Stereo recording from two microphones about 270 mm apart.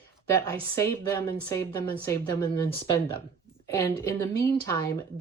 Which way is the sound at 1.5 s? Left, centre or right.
Centre.